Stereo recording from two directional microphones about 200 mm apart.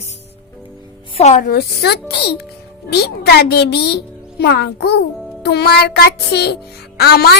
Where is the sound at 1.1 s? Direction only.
35° left (ahead or behind).